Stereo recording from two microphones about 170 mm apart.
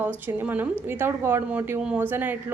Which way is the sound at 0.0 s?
10° right (ahead or behind).